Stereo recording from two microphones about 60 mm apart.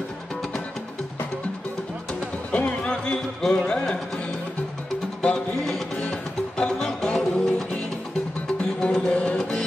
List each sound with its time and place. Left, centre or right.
2.5 s speech: centre
5.2 s music: centre